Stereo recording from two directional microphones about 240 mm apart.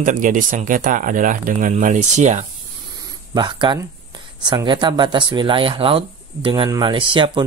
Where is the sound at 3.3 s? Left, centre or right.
Centre.